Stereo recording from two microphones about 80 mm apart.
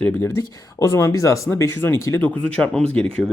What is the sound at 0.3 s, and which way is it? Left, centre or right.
Speech, left.